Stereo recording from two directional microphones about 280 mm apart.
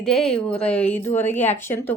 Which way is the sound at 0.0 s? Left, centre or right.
Centre.